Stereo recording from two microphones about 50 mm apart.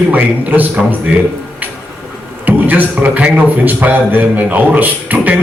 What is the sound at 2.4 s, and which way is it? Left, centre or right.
A man's voice, right.